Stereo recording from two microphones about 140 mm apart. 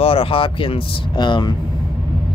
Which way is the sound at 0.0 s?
40° left (ahead or behind).